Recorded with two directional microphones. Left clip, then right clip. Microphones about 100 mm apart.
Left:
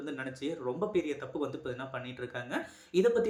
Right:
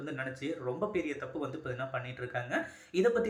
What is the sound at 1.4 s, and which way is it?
Speech, 40° left (ahead or behind).